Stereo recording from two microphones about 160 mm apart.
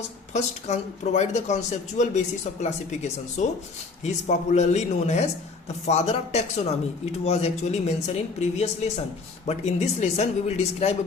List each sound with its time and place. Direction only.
0.3 s a man's voice: 45° left (ahead or behind)